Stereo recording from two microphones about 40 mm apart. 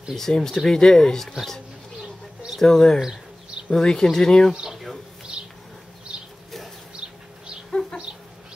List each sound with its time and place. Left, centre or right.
0.3 s speech: centre
2.6 s speech: centre
5.3 s bee: centre
7.0 s a sound: centre